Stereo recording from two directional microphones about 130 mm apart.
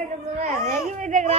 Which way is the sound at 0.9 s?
70° right (ahead or behind).